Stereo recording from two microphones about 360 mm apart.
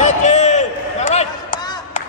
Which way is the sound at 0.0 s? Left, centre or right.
Centre.